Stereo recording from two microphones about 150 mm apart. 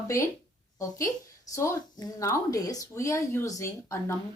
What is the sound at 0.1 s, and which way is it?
Speech, 20° left (ahead or behind).